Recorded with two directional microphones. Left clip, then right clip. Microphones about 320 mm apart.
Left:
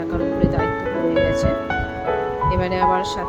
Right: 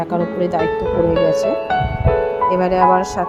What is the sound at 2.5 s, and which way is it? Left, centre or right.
Speech, centre.